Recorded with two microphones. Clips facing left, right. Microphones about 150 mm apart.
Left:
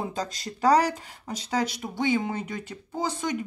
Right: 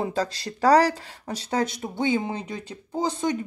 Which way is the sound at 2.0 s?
25° right (ahead or behind).